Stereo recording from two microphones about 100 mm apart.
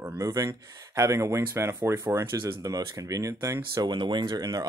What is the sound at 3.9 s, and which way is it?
Speech, 50° right (ahead or behind).